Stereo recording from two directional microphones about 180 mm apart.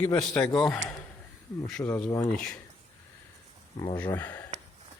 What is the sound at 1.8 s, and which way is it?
Speech, 15° left (ahead or behind).